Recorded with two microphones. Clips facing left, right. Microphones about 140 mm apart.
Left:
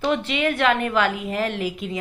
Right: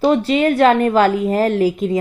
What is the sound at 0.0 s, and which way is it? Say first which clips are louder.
A woman's voice: right 8 dB; 35° right (ahead or behind).